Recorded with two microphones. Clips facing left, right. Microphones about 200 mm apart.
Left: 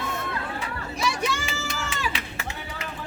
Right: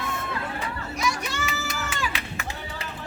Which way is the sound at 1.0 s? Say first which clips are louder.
Left 2 dB; 30° left (ahead or behind).